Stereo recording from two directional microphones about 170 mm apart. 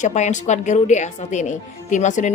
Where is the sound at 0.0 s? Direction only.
45° left (ahead or behind).